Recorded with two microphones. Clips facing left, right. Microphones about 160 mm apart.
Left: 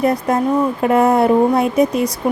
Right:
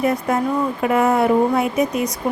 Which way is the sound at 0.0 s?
35° left (ahead or behind).